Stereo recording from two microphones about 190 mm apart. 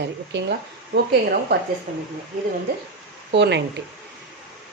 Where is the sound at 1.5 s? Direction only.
60° right (ahead or behind).